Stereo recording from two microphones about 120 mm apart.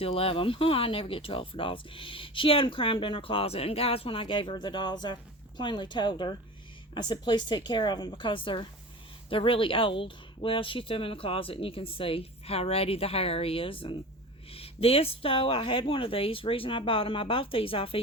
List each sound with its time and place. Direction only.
0.0 s a woman's voice: 55° left (ahead or behind)